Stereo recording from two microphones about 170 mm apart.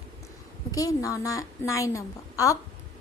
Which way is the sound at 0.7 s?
20° left (ahead or behind).